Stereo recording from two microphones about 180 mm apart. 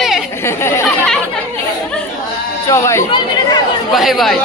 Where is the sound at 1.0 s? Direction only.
5° left (ahead or behind).